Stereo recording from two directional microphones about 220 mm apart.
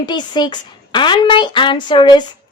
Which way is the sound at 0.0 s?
20° left (ahead or behind).